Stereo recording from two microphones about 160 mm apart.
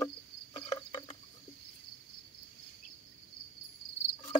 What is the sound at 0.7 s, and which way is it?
Cricket, 30° left (ahead or behind).